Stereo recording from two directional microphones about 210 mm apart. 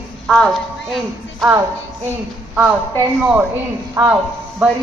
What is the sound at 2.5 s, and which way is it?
Speech, 5° right (ahead or behind).